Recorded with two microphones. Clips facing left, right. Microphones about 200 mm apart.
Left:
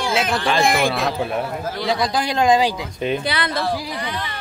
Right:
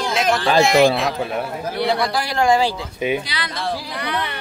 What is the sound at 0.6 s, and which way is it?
Speech, 55° left (ahead or behind).